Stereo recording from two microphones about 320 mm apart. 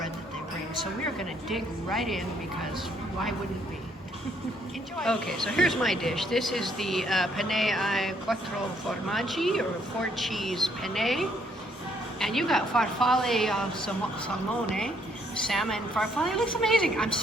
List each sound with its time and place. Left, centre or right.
1.5 s speech: centre
4.9 s speech: centre
15.4 s speech: centre